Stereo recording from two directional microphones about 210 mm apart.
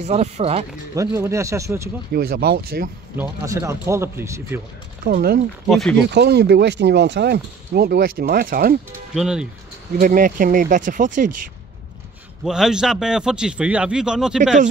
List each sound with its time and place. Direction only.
0.0 s speech: 30° right (ahead or behind)
0.9 s speech: 15° right (ahead or behind)
2.1 s speech: 45° right (ahead or behind)
3.2 s speech: 15° right (ahead or behind)
5.0 s speech: 45° right (ahead or behind)
5.7 s a man's voice: centre (ahead or behind)
6.0 s speech: 55° right (ahead or behind)
9.1 s a man's voice: 5° right (ahead or behind)
9.9 s speech: 40° right (ahead or behind)
12.4 s a man's voice: 5° right (ahead or behind)